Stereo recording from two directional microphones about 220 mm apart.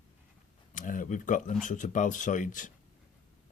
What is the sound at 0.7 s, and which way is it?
Speech, 35° left (ahead or behind).